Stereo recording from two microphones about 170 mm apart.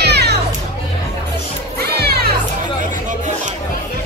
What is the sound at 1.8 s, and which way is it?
Children playing, 70° right (ahead or behind).